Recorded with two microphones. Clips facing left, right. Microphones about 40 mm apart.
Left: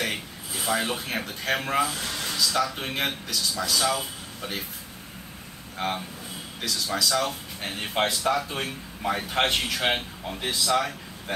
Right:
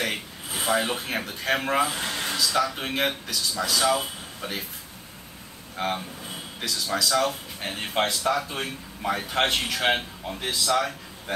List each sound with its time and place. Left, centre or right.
0.7 s a man's voice: centre
1.9 s speech: right
2.3 s a man's voice: centre
5.8 s a man's voice: centre